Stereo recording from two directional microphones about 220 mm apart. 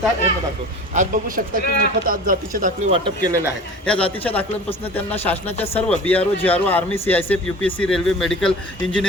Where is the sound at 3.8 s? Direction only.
5° left (ahead or behind).